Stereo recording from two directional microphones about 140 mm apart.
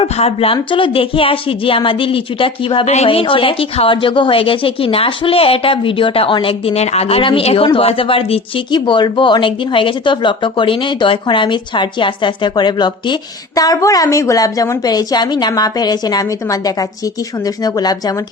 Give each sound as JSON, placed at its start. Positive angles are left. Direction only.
{"t": 0.0, "sound": "a woman's voice", "side_deg": 45}